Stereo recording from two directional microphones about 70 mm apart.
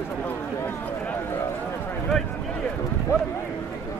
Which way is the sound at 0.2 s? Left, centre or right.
Left.